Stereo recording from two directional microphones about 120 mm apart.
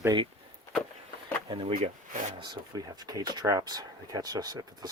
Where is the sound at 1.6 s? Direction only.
60° right (ahead or behind).